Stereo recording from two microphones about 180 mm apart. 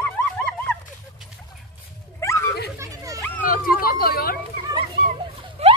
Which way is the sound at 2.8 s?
20° right (ahead or behind).